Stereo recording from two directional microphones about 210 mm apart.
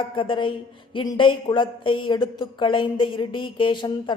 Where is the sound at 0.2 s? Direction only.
25° left (ahead or behind).